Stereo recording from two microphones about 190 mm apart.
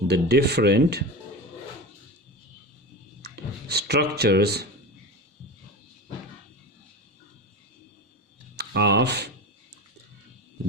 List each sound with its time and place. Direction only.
0.1 s speech: 60° right (ahead or behind)
3.3 s speech: 60° right (ahead or behind)
8.5 s speech: 60° right (ahead or behind)